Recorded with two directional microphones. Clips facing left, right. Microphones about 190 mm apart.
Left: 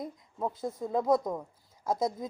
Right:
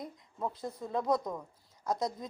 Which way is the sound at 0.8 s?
20° left (ahead or behind).